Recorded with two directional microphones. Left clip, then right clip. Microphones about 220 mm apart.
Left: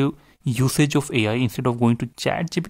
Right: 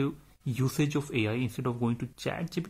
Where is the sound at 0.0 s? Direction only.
40° left (ahead or behind).